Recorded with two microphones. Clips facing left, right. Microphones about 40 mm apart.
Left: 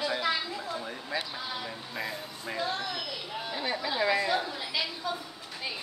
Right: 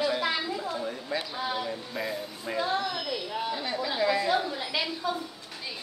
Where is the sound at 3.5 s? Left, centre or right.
Centre.